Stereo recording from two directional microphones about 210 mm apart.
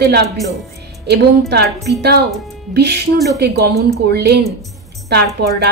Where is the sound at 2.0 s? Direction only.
50° right (ahead or behind).